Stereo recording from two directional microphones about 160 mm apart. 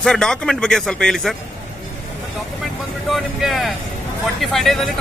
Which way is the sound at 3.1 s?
Centre (ahead or behind).